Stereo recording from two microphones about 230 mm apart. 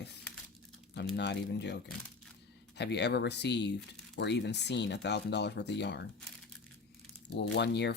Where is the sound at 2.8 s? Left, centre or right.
Left.